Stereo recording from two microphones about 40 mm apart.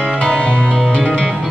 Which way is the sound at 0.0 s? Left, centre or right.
Centre.